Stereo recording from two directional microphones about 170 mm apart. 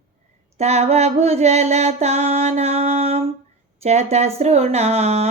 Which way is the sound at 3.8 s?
40° right (ahead or behind).